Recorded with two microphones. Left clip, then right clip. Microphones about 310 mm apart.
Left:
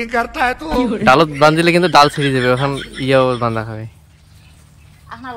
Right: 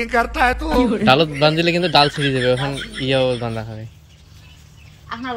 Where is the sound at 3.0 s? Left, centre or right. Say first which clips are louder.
Left 5 dB; centre.